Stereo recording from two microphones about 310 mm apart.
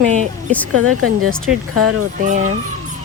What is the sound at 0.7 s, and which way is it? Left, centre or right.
Speech, right.